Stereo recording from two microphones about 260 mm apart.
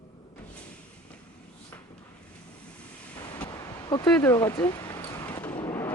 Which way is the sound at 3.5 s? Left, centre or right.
Centre.